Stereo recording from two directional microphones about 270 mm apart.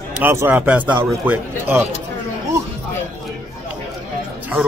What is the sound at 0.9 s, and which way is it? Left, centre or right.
Speech, centre.